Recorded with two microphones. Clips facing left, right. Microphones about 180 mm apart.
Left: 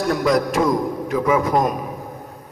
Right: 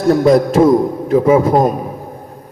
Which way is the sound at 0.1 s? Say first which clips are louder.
Right 10 dB; 30° right (ahead or behind).